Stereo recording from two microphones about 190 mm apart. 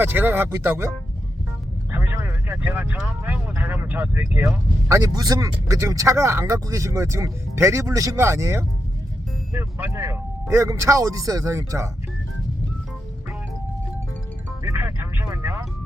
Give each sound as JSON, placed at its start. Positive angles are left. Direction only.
{"t": 0.0, "sound": "speech", "side_deg": -10}
{"t": 1.9, "sound": "speech", "side_deg": -10}
{"t": 14.6, "sound": "music", "side_deg": -15}